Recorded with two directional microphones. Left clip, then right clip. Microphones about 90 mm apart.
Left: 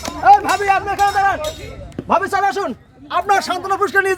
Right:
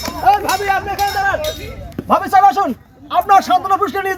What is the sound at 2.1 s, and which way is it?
Speech, 40° left (ahead or behind).